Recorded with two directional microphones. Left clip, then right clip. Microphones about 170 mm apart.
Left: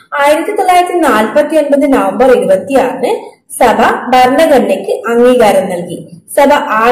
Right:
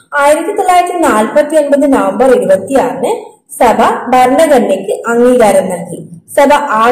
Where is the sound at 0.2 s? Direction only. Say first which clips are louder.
Even; centre (ahead or behind).